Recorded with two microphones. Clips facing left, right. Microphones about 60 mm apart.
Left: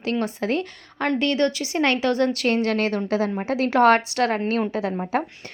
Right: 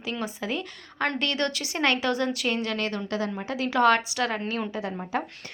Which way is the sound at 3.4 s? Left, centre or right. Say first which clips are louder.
Left 5 dB; left.